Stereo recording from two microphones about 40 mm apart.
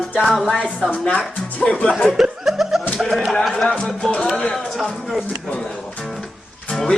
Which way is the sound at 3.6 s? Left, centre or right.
Left.